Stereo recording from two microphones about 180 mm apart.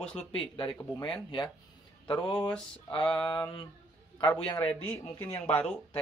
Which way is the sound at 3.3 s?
25° left (ahead or behind).